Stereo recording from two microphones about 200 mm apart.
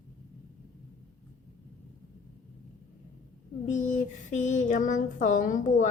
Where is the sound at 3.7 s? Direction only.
35° left (ahead or behind).